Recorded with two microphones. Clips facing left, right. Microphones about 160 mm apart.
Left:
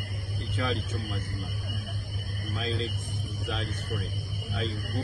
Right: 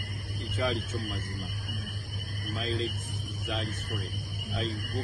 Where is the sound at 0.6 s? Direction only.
Centre (ahead or behind).